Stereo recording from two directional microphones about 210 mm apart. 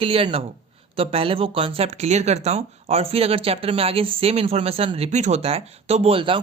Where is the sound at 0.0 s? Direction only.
25° right (ahead or behind).